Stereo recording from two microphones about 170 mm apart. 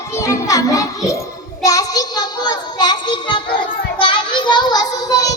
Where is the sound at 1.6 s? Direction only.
20° left (ahead or behind).